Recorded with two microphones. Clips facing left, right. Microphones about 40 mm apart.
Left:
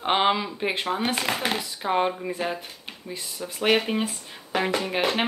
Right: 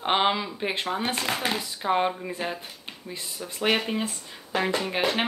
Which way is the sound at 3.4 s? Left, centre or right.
Centre.